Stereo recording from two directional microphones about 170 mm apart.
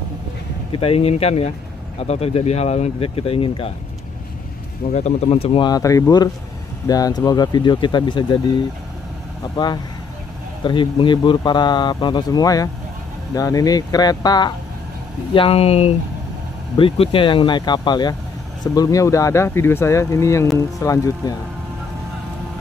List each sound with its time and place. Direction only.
0.7 s speech: 35° left (ahead or behind)
4.9 s speech: 40° left (ahead or behind)
10.6 s speech: 30° left (ahead or behind)
15.3 s speech: 35° left (ahead or behind); by 21.4 s 20° left (ahead or behind)